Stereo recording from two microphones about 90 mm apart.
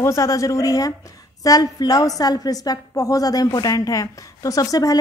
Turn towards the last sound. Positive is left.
turn(degrees=45)  # may be behind; listen again after turning